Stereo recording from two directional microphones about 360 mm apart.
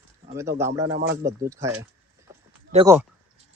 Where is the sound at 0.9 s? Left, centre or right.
Right.